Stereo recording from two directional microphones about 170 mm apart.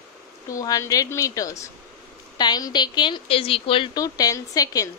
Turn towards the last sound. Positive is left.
turn(degrees=20)  # may be behind; listen again after turning